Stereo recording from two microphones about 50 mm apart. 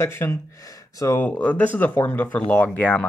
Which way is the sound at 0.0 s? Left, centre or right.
Left.